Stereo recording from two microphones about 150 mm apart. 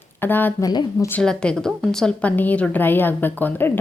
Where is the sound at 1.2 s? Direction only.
5° left (ahead or behind).